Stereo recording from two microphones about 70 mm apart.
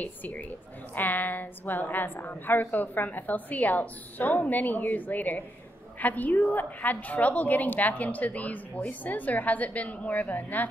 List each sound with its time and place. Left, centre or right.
0.0 s a woman's voice: left